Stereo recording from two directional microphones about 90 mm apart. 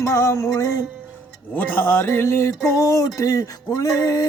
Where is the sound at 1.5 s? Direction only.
25° left (ahead or behind).